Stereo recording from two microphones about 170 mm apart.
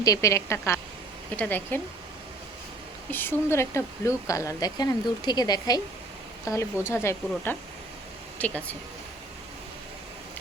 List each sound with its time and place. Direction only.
0.0 s a woman's voice: 20° left (ahead or behind)
3.1 s a woman's voice: 10° left (ahead or behind)